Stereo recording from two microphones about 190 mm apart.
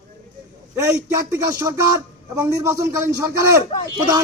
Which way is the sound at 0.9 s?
15° right (ahead or behind).